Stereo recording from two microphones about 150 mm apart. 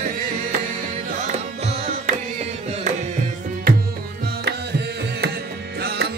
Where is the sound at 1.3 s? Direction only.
45° right (ahead or behind).